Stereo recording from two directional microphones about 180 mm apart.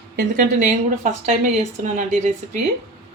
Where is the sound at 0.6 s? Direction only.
45° right (ahead or behind).